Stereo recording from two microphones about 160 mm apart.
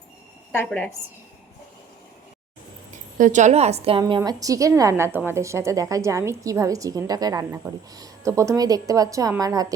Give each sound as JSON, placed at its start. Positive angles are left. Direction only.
{"t": 0.5, "sound": "a woman's voice", "side_deg": 10}
{"t": 2.9, "sound": "a woman's voice", "side_deg": -50}
{"t": 4.0, "sound": "a woman's voice", "side_deg": -25}